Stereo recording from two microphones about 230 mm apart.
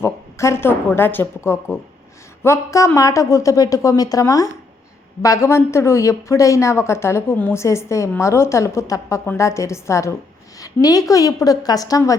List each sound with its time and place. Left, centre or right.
0.0 s a woman's voice: centre